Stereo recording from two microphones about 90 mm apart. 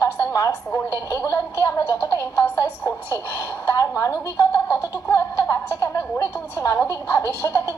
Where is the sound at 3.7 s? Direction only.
35° left (ahead or behind).